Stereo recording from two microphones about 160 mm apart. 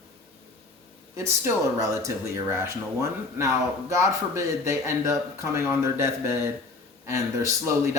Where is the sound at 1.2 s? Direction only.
20° right (ahead or behind).